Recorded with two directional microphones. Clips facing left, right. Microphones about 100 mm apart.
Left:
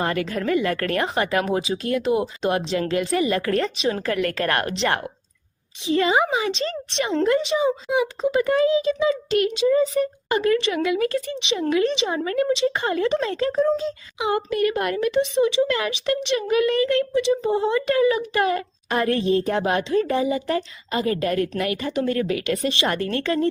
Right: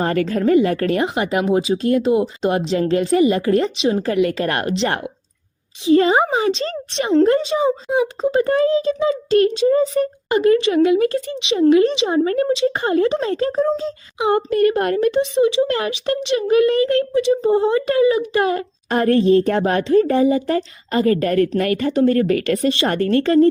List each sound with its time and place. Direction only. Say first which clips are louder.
0.0 s speech: right 6 dB; 40° right (ahead or behind)
10.2 s a woman's voice: right 7 dB; 25° right (ahead or behind); by 22.7 s 50° right (ahead or behind)
22.8 s speech: right 6 dB; 40° right (ahead or behind)